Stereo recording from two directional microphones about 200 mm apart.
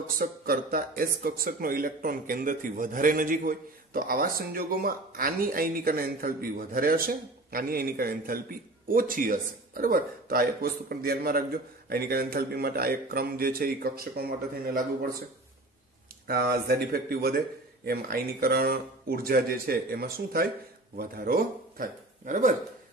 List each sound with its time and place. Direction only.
0.2 s speech: 45° right (ahead or behind)
16.3 s a man's voice: 50° right (ahead or behind)